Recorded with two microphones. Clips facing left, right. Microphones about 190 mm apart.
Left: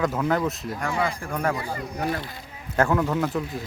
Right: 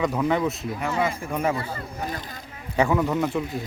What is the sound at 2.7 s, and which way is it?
Speech, centre (ahead or behind).